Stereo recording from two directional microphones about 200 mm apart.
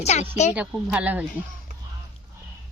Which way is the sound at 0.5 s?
5° right (ahead or behind).